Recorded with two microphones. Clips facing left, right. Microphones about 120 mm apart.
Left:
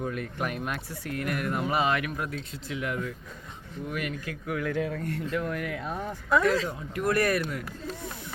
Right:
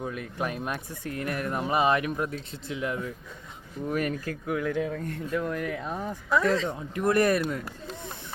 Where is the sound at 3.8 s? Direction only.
40° right (ahead or behind).